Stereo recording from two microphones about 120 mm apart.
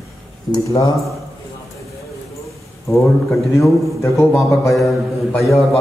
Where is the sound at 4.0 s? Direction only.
25° left (ahead or behind).